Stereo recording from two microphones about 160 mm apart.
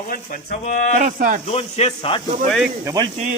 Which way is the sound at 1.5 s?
40° left (ahead or behind).